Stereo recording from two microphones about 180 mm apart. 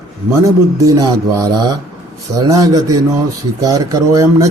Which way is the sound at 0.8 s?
20° right (ahead or behind).